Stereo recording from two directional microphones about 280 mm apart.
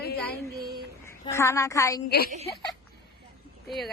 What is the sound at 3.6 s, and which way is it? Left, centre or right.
Speech, centre.